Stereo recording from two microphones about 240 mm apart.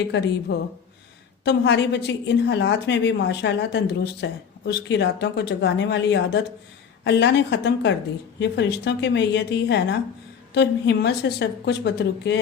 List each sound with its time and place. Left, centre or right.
0.5 s a woman's voice: left